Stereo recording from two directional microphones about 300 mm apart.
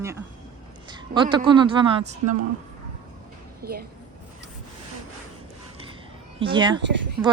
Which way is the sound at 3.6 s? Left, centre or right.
Right.